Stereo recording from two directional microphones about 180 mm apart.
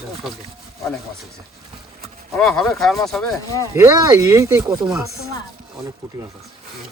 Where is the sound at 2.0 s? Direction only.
5° left (ahead or behind).